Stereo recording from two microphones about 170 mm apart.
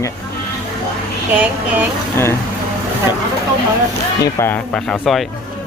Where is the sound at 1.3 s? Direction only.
10° right (ahead or behind).